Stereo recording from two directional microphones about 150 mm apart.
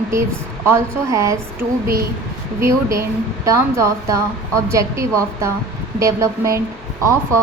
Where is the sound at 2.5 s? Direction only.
20° right (ahead or behind).